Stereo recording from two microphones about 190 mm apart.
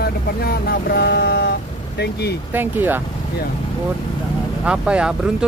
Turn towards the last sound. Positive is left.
turn(degrees=-5)  # may be behind; listen again after turning